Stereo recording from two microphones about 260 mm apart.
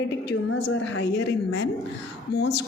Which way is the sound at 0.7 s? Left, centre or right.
Left.